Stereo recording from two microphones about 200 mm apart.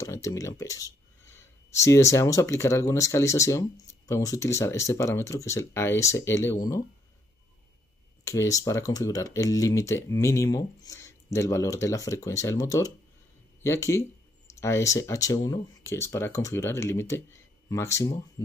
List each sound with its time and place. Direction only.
0.0 s speech: 15° left (ahead or behind)
8.2 s speech: 15° left (ahead or behind)